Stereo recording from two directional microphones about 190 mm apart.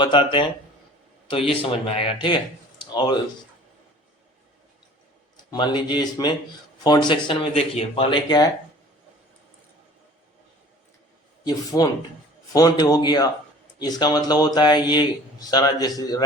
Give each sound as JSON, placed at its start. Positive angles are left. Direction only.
{"t": 0.0, "sound": "speech", "side_deg": 25}
{"t": 5.5, "sound": "speech", "side_deg": 25}
{"t": 11.4, "sound": "speech", "side_deg": 20}